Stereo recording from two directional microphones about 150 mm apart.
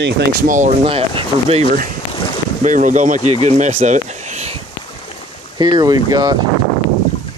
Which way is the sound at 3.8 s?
50° right (ahead or behind).